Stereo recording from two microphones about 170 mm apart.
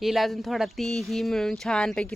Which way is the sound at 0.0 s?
Centre (ahead or behind).